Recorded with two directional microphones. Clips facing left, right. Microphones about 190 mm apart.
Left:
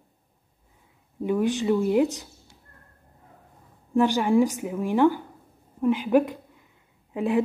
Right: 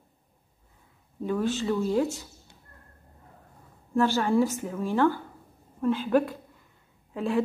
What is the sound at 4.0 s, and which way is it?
A woman's voice, 15° left (ahead or behind).